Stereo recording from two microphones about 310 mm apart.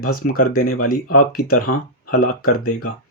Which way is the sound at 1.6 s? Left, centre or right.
Left.